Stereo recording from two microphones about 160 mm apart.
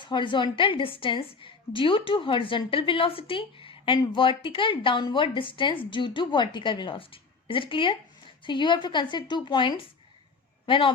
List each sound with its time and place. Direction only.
0.0 s a woman's voice: 30° left (ahead or behind)